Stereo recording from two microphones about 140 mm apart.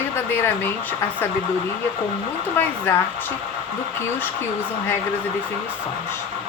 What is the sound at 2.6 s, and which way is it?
Speech, 15° left (ahead or behind).